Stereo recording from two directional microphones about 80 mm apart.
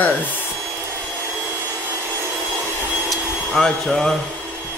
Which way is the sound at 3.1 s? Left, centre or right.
Centre.